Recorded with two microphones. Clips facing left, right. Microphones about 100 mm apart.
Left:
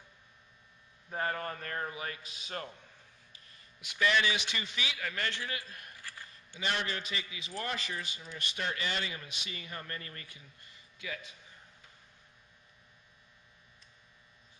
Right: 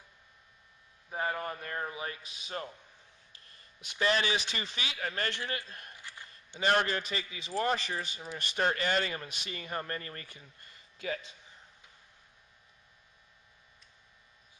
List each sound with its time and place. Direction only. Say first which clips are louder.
1.1 s a man's voice: right 1 dB; 10° right (ahead or behind)
2.2 s a man's voice: even; 30° left (ahead or behind)
3.8 s a man's voice: even; 30° right (ahead or behind)
5.9 s a sound: even; 20° right (ahead or behind)
6.6 s a man's voice: right 7 dB; 45° right (ahead or behind)